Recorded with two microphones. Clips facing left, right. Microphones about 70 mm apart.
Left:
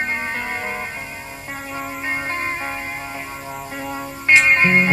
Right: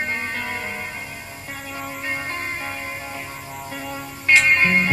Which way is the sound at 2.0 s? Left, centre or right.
Left.